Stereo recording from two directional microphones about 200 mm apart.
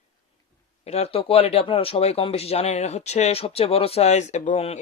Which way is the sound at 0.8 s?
30° left (ahead or behind).